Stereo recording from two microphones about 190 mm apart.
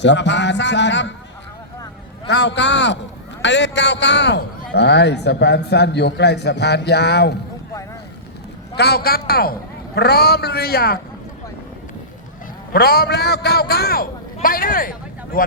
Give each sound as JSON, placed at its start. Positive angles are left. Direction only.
{"t": 0.0, "sound": "a man's voice", "side_deg": 65}
{"t": 2.2, "sound": "a man's voice", "side_deg": 65}
{"t": 8.7, "sound": "a man's voice", "side_deg": 60}
{"t": 12.7, "sound": "a man's voice", "side_deg": 55}